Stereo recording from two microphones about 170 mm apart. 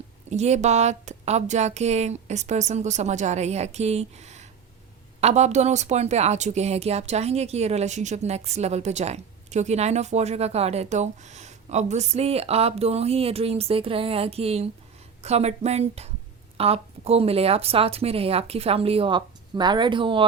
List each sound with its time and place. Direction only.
0.3 s speech: 40° right (ahead or behind)